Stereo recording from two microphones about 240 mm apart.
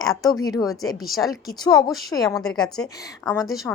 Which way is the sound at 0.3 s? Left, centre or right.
Centre.